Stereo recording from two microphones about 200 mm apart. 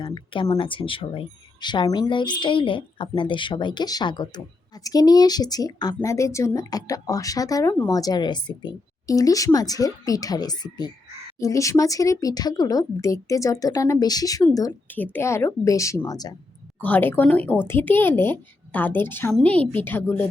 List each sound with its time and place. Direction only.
0.0 s speech: 25° left (ahead or behind)
16.8 s speech: 10° left (ahead or behind)